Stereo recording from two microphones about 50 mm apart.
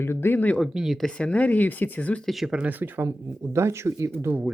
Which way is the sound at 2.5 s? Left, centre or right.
Right.